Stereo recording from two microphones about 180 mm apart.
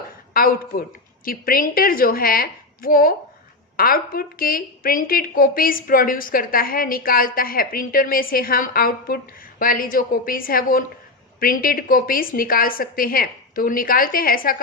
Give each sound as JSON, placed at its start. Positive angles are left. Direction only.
{"t": 0.3, "sound": "a woman's voice", "side_deg": 50}